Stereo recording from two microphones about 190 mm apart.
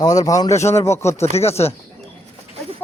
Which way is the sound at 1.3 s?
35° left (ahead or behind).